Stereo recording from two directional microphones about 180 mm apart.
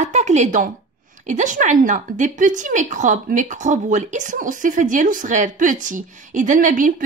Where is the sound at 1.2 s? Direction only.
45° right (ahead or behind).